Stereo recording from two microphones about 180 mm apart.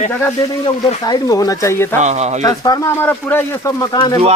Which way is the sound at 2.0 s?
40° right (ahead or behind).